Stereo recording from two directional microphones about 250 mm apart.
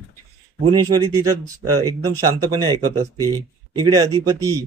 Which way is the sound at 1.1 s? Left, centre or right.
Centre.